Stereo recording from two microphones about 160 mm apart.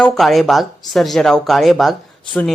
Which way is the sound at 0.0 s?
Centre (ahead or behind).